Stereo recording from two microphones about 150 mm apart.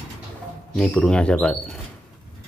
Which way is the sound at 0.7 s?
5° left (ahead or behind).